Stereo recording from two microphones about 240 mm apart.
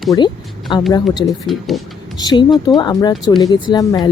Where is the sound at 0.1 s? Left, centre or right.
Centre.